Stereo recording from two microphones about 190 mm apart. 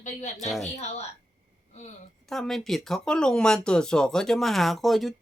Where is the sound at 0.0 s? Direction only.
35° left (ahead or behind).